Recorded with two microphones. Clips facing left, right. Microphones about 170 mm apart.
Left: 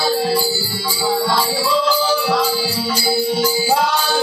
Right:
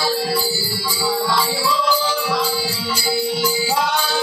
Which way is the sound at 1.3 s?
45° left (ahead or behind).